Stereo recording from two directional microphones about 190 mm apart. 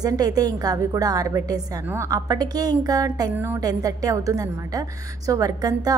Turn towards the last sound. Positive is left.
turn(degrees=-20)  # may be behind; listen again after turning